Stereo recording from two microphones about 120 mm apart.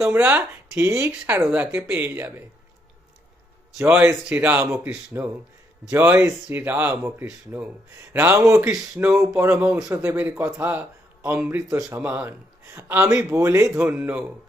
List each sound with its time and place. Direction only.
0.0 s speech: 15° right (ahead or behind)
3.8 s a man's voice: 10° right (ahead or behind)